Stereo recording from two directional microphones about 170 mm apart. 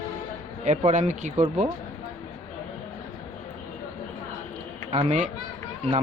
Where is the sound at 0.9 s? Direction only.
45° right (ahead or behind).